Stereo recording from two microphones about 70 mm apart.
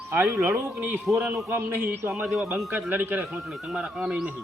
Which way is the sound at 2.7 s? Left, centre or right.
Right.